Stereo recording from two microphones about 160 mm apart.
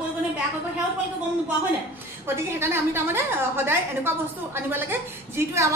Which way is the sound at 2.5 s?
15° right (ahead or behind).